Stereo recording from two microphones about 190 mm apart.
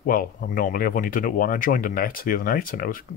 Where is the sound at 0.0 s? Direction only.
45° left (ahead or behind).